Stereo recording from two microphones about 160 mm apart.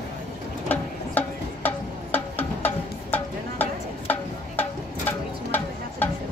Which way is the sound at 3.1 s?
10° left (ahead or behind).